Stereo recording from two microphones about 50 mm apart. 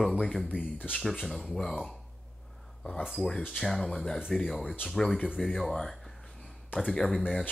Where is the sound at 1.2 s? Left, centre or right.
Centre.